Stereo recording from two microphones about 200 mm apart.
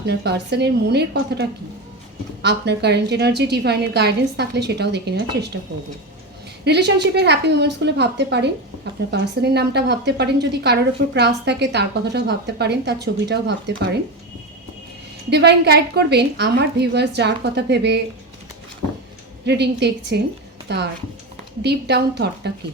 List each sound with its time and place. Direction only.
0.0 s a woman's voice: 55° right (ahead or behind)
6.7 s a woman's voice: 60° right (ahead or behind)
15.3 s a woman's voice: 55° right (ahead or behind)
19.5 s a woman's voice: 55° right (ahead or behind)